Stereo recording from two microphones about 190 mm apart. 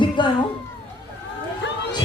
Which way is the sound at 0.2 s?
25° left (ahead or behind).